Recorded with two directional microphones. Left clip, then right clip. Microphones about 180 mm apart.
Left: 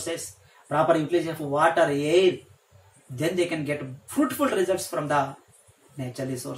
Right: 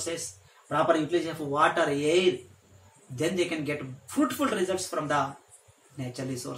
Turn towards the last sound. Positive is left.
turn(degrees=-15)  # may be behind; listen again after turning